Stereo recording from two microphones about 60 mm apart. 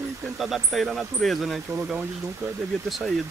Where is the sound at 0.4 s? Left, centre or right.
Centre.